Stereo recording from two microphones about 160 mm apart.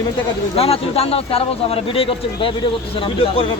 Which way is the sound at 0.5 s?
40° left (ahead or behind).